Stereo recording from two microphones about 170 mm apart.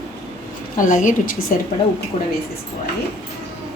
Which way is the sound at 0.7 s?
50° left (ahead or behind).